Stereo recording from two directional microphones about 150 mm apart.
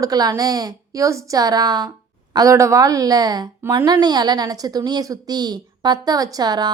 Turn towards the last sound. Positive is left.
turn(degrees=-30)  # may be behind; listen again after turning